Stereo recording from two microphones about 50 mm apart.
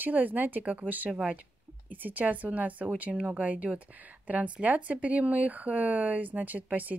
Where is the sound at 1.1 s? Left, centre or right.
Centre.